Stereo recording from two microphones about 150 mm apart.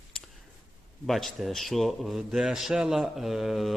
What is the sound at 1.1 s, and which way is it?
A man's voice, centre (ahead or behind).